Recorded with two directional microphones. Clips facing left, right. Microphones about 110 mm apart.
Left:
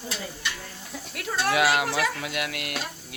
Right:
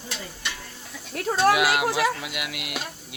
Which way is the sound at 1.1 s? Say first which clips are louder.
Right 7 dB; 40° right (ahead or behind).